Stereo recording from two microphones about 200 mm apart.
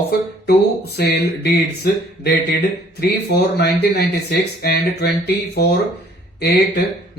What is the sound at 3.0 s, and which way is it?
Speech, 55° left (ahead or behind).